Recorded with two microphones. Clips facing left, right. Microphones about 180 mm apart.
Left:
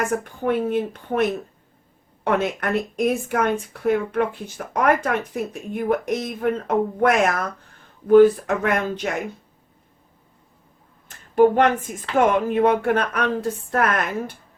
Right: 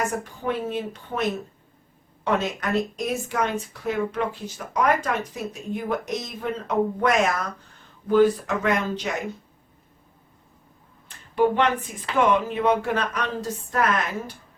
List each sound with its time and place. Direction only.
0.4 s speech: 55° left (ahead or behind)
11.1 s speech: 45° left (ahead or behind)